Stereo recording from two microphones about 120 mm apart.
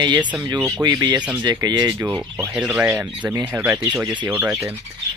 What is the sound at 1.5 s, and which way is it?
Speech, 35° right (ahead or behind).